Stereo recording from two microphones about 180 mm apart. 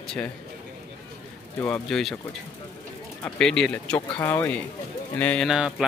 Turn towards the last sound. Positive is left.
turn(degrees=-5)  # may be behind; listen again after turning